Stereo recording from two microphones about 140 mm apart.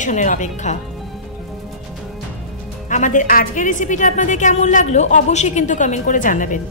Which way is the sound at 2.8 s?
65° left (ahead or behind).